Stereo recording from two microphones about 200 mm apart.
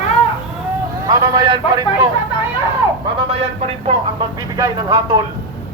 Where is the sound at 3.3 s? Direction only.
30° right (ahead or behind).